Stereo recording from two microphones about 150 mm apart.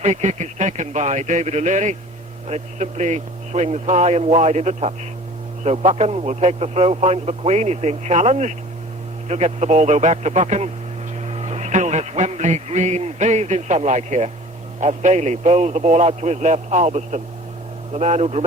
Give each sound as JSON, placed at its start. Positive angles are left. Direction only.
{"t": 0.0, "sound": "a man's voice", "side_deg": -50}